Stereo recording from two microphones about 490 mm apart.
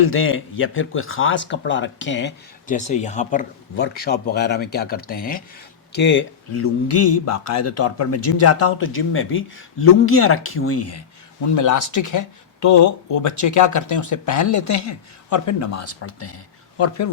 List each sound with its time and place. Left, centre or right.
0.0 s speech: left